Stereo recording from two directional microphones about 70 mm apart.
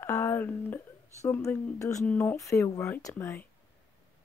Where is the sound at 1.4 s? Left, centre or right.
Left.